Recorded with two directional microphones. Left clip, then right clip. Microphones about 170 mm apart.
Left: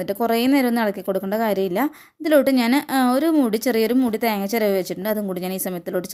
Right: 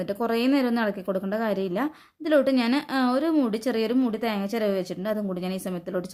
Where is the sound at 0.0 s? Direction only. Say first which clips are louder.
Left 5 dB; 25° left (ahead or behind).